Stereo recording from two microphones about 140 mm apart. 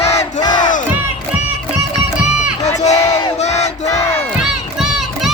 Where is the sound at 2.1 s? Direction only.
5° right (ahead or behind).